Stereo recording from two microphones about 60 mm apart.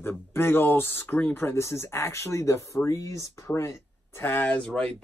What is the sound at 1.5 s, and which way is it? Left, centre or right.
Speech, left.